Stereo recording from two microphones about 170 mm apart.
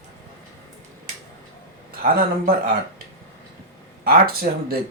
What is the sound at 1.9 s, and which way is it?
Speech, 60° right (ahead or behind).